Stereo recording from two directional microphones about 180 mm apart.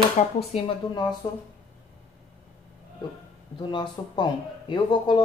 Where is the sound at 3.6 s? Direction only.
25° left (ahead or behind).